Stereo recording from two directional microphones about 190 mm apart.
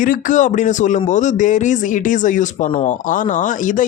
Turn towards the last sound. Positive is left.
turn(degrees=45)  # may be behind; listen again after turning